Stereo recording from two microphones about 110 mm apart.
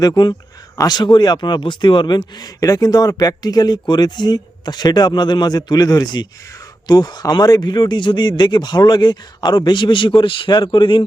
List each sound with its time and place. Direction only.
0.0 s speech: 40° left (ahead or behind)